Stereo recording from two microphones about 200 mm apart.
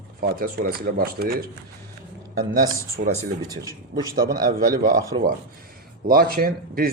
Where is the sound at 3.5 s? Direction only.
20° right (ahead or behind).